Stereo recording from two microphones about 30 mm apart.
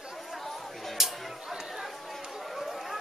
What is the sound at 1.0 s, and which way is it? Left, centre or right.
Chatter, centre.